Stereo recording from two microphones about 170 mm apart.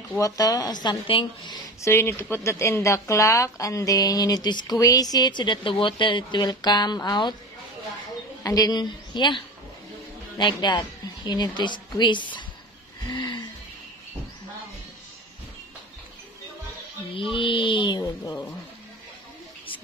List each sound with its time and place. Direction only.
0.2 s speech: 20° left (ahead or behind)
1.8 s speech: 15° left (ahead or behind)
8.5 s speech: 20° left (ahead or behind)
13.1 s a sound: 25° left (ahead or behind)
17.2 s speech: 30° left (ahead or behind)